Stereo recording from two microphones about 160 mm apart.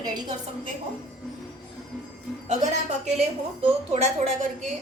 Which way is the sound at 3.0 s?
40° right (ahead or behind).